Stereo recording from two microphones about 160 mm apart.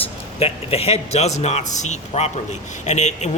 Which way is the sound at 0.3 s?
35° left (ahead or behind).